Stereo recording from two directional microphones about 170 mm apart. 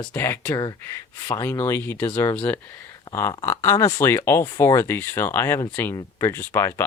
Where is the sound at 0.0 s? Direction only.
10° left (ahead or behind).